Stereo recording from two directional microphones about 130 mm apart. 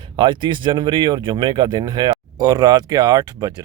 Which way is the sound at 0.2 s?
35° right (ahead or behind).